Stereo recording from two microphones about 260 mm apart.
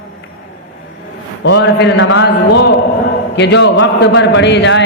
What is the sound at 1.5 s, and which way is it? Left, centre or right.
A man's voice, left.